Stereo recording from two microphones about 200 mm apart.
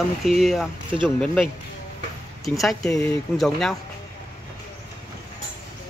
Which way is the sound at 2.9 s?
15° left (ahead or behind).